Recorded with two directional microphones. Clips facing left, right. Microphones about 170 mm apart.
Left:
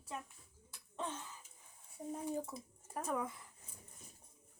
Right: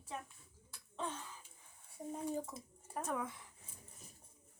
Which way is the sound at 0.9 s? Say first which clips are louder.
Even; 5° left (ahead or behind).